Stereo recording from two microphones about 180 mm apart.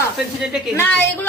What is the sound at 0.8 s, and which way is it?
Speech, 10° left (ahead or behind).